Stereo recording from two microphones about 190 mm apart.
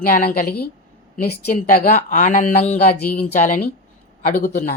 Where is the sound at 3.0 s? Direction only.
10° left (ahead or behind).